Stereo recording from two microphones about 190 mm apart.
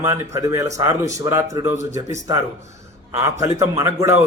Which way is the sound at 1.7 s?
80° left.